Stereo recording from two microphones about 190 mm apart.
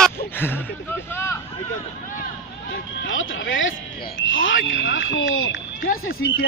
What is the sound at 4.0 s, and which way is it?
Speech, 55° left (ahead or behind).